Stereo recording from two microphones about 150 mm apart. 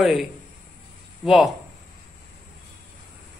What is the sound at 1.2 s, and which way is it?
Speech, centre (ahead or behind).